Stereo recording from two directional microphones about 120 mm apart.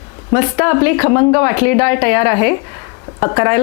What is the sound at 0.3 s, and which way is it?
Speech, 20° left (ahead or behind).